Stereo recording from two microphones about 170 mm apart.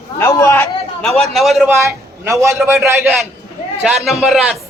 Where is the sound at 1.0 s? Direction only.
Centre (ahead or behind).